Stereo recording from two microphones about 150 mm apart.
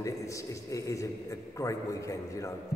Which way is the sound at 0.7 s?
20° left (ahead or behind).